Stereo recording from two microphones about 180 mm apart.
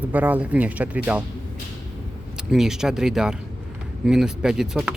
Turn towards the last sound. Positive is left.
turn(degrees=-5)  # may be behind; listen again after turning